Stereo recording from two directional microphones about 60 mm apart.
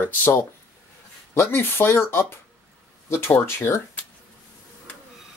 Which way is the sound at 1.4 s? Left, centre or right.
Left.